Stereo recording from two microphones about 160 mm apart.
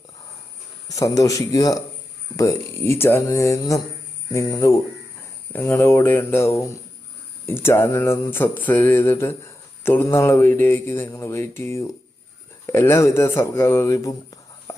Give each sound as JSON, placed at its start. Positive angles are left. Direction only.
{"t": 0.9, "sound": "speech", "side_deg": 20}
{"t": 5.5, "sound": "mantra", "side_deg": 15}
{"t": 12.6, "sound": "speech", "side_deg": 15}